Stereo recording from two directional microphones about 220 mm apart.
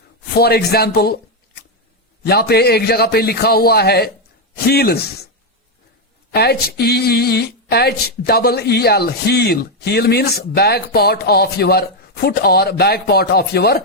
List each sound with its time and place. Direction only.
0.3 s speech: 45° left (ahead or behind)
2.2 s speech: 45° left (ahead or behind)
6.3 s speech: 45° left (ahead or behind)